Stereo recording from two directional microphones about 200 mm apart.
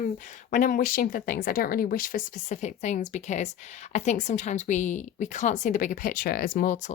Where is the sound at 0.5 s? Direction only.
40° left (ahead or behind).